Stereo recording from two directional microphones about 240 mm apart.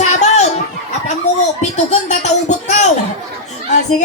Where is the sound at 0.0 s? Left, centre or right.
Left.